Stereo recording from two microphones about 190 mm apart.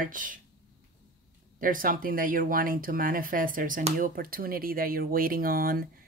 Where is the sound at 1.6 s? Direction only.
45° right (ahead or behind).